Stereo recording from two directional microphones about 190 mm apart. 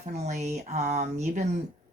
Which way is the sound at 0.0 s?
35° right (ahead or behind).